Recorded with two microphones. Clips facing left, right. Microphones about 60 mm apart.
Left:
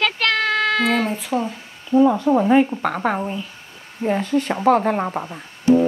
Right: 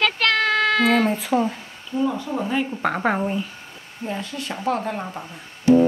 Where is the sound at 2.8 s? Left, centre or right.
Centre.